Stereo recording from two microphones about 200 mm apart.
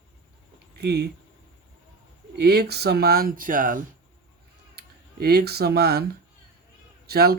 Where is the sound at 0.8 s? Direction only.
55° right (ahead or behind).